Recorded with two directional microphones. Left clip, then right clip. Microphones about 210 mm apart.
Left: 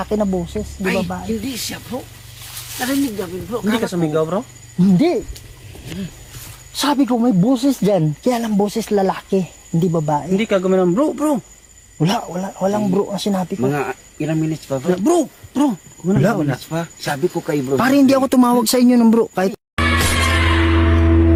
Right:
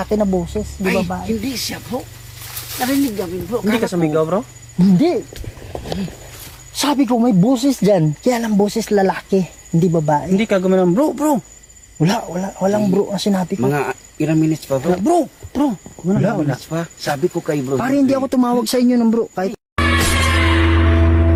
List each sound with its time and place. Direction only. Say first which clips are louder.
0.0 s speech: right 2 dB; 5° right (ahead or behind)
0.8 s speech: right 1 dB; 15° right (ahead or behind)
1.0 s speech: right 2 dB; 10° left (ahead or behind)
1.3 s speech: right 2 dB; 15° right (ahead or behind)
3.7 s speech: right 1 dB; 5° right (ahead or behind)
4.9 s speech: even; 25° left (ahead or behind)
6.7 s speech: right 1 dB; centre (ahead or behind)
10.3 s speech: left 2 dB; 40° right (ahead or behind)
11.9 s speech: right 1 dB; centre (ahead or behind)
13.7 s cricket: right 3 dB; 50° right (ahead or behind)
14.9 s speech: right 1 dB; 15° left (ahead or behind)
16.6 s speech: even; 5° right (ahead or behind)
17.7 s speech: left 4 dB; 45° left (ahead or behind)
19.7 s music: right 2 dB; centre (ahead or behind)